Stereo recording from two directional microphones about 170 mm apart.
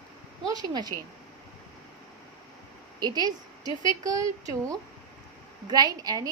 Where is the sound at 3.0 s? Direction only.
25° right (ahead or behind).